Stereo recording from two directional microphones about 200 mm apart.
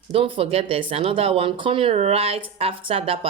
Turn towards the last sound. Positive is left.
turn(degrees=-30)  # may be behind; listen again after turning